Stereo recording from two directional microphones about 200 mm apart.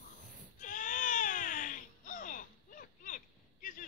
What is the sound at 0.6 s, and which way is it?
Baby cry, 40° left (ahead or behind).